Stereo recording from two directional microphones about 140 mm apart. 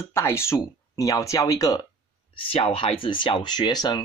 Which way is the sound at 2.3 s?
40° left (ahead or behind).